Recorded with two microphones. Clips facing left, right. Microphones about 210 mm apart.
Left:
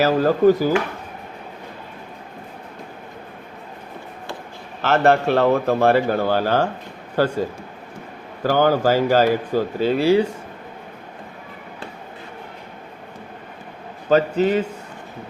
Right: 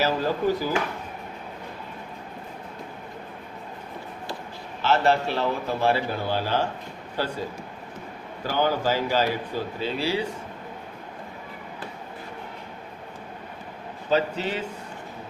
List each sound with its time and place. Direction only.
0.0 s speech: 50° left (ahead or behind)
4.8 s a man's voice: 55° left (ahead or behind)
8.4 s speech: 50° left (ahead or behind)
14.1 s speech: 50° left (ahead or behind)